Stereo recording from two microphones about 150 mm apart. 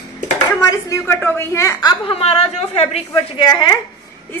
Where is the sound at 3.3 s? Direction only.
30° left (ahead or behind).